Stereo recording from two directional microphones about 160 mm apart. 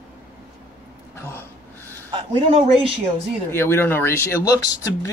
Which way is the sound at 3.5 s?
15° left (ahead or behind).